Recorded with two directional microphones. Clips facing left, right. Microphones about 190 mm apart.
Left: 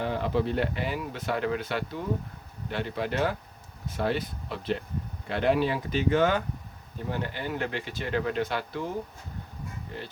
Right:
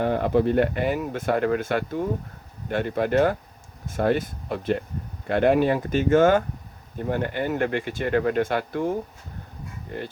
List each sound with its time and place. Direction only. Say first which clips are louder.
0.0 s speech: right 7 dB; 50° right (ahead or behind)